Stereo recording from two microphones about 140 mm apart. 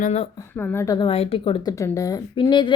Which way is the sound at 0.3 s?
15° left (ahead or behind).